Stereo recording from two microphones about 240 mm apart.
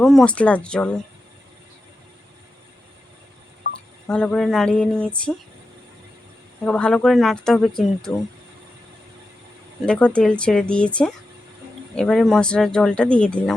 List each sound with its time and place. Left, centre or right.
0.0 s speech: centre
4.1 s speech: centre
6.7 s speech: centre
9.8 s speech: centre